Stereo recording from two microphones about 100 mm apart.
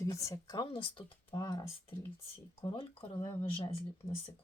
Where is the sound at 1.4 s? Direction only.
40° left (ahead or behind).